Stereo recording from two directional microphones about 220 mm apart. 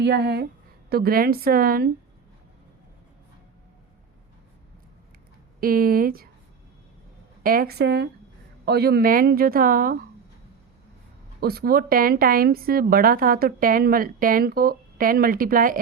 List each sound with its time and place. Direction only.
0.0 s speech: 50° right (ahead or behind)
5.5 s speech: 40° right (ahead or behind)
7.4 s speech: 40° right (ahead or behind)
11.3 s speech: 45° right (ahead or behind)